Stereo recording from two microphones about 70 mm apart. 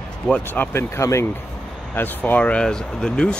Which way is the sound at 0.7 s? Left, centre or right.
Left.